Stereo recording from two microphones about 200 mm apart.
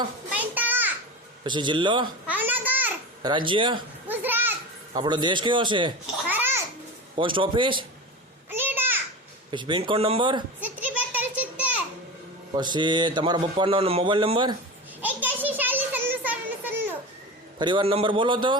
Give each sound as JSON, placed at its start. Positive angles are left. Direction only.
{"t": 0.3, "sound": "a sound", "side_deg": -10}
{"t": 1.5, "sound": "speech", "side_deg": -25}
{"t": 2.2, "sound": "babbling", "side_deg": -10}
{"t": 3.2, "sound": "speech", "side_deg": -25}
{"t": 4.1, "sound": "children playing", "side_deg": -10}
{"t": 4.9, "sound": "speech", "side_deg": -20}
{"t": 6.2, "sound": "babbling", "side_deg": -10}
{"t": 7.2, "sound": "speech", "side_deg": -25}
{"t": 8.4, "sound": "a sound", "side_deg": -10}
{"t": 9.5, "sound": "speech", "side_deg": -25}
{"t": 10.6, "sound": "children playing", "side_deg": -10}
{"t": 12.5, "sound": "speech", "side_deg": -20}
{"t": 15.0, "sound": "children playing", "side_deg": -10}
{"t": 17.6, "sound": "speech", "side_deg": -25}